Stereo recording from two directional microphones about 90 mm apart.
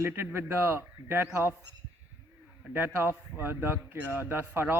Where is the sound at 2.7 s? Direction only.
25° right (ahead or behind).